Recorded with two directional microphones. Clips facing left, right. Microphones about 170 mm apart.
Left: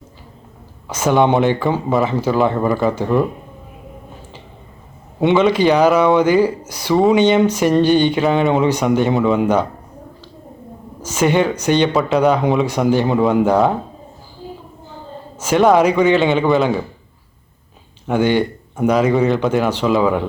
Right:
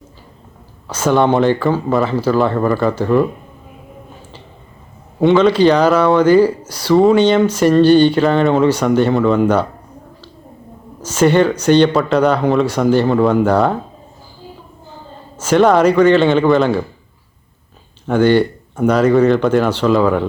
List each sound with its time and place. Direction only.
0.9 s a man's voice: 15° left (ahead or behind)
5.4 s speech: 10° left (ahead or behind)
11.0 s speech: 15° left (ahead or behind)
15.4 s a man's voice: 15° left (ahead or behind)
18.1 s speech: 15° left (ahead or behind)